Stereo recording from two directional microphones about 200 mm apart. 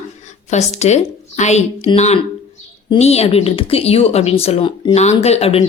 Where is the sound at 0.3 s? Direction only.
35° left (ahead or behind).